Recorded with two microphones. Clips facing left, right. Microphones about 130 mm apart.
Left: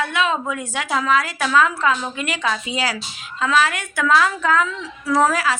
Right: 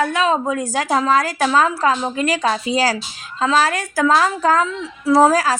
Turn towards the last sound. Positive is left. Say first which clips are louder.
# right 5 dB
turn(degrees=-40)  # may be behind; listen again after turning